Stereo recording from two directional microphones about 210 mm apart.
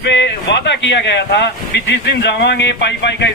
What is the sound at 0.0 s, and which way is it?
Speech, 55° left (ahead or behind).